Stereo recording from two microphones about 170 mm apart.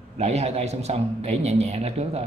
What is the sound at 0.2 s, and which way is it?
Speech, 40° right (ahead or behind).